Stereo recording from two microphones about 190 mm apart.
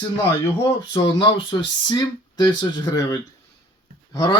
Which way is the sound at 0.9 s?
25° left (ahead or behind).